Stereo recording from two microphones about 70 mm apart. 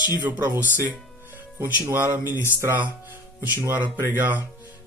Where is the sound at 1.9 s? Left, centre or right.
Right.